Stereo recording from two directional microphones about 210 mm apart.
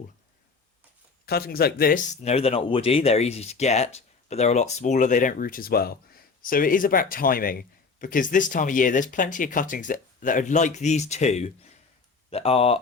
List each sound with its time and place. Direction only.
1.2 s a man's voice: 45° left (ahead or behind); by 12.8 s 30° left (ahead or behind)